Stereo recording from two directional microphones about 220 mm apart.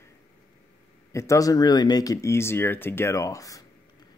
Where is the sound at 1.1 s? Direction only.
15° left (ahead or behind).